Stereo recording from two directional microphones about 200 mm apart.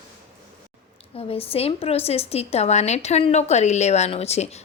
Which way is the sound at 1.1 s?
30° left (ahead or behind).